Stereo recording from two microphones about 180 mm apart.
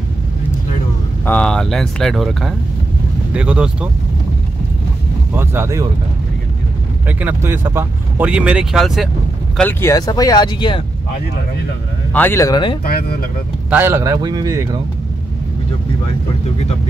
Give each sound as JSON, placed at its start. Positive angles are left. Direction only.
{"t": 1.2, "sound": "speech", "side_deg": 10}
{"t": 5.3, "sound": "speech", "side_deg": -10}
{"t": 7.1, "sound": "speech", "side_deg": -10}
{"t": 9.6, "sound": "speech", "side_deg": 10}
{"t": 12.1, "sound": "speech", "side_deg": 10}
{"t": 12.8, "sound": "speech", "side_deg": 55}
{"t": 13.7, "sound": "speech", "side_deg": -10}